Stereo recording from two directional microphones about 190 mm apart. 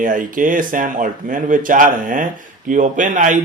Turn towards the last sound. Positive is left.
turn(degrees=-40)  # may be behind; listen again after turning